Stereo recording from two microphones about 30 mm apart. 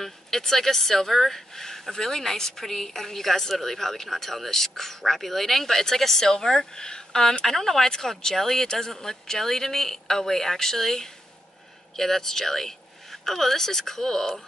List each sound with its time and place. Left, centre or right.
0.0 s a woman's voice: centre